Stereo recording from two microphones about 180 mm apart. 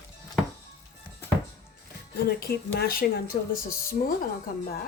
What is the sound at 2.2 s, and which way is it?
Speech, 60° left (ahead or behind).